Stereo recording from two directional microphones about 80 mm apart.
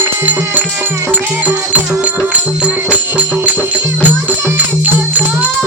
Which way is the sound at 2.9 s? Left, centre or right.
Centre.